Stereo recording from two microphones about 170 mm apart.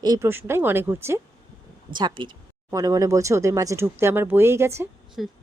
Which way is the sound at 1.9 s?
25° right (ahead or behind).